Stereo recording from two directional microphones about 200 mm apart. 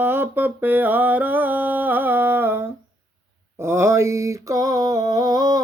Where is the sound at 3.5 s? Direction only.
15° right (ahead or behind).